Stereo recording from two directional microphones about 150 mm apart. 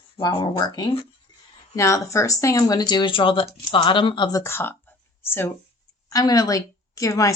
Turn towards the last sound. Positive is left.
turn(degrees=20)  # may be behind; listen again after turning